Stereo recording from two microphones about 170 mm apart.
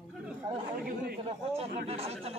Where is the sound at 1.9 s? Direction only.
35° right (ahead or behind).